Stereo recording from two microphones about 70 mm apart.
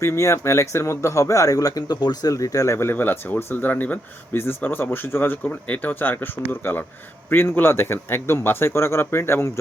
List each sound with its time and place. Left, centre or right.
0.0 s speech: left
2.3 s speech: left
2.7 s a man's voice: left